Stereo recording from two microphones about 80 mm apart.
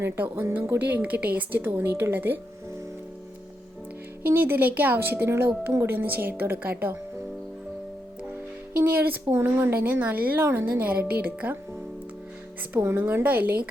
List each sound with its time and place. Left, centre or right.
0.0 s speech: right
4.3 s speech: right
8.8 s speech: right
10.4 s a woman's voice: right
10.8 s speech: centre
12.7 s speech: right